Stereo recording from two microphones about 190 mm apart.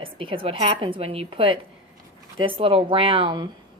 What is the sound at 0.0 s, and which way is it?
A woman's voice, 30° right (ahead or behind).